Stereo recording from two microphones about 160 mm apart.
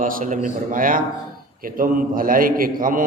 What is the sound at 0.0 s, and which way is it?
A man's voice, 55° right (ahead or behind).